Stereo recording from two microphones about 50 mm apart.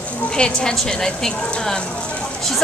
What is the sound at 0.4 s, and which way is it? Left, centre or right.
A woman's voice, centre.